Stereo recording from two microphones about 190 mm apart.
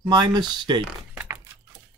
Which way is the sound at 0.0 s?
20° right (ahead or behind).